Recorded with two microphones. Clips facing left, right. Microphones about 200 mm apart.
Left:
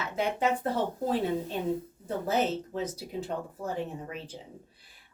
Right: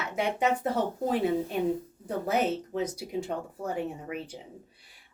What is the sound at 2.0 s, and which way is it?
A woman's voice, 15° right (ahead or behind).